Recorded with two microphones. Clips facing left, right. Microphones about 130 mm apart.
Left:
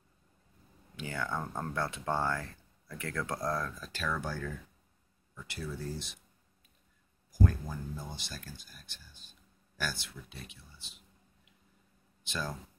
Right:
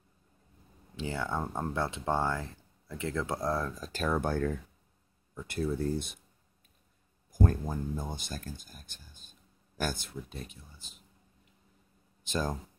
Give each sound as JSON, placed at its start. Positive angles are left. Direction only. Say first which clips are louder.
{"t": 0.9, "sound": "speech", "louder": "right 3 dB", "side_deg": -25}
{"t": 3.8, "sound": "speech", "louder": "right 6 dB", "side_deg": -45}
{"t": 7.3, "sound": "speech", "louder": "right 2 dB", "side_deg": -45}
{"t": 12.3, "sound": "speech", "louder": "right 6 dB", "side_deg": -45}